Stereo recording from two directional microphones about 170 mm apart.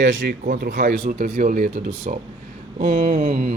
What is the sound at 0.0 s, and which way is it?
Speech, 45° right (ahead or behind).